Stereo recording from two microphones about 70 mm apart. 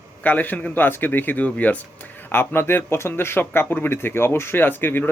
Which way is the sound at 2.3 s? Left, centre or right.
Left.